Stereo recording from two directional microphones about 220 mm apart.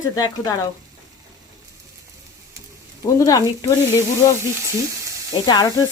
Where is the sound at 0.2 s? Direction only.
15° left (ahead or behind).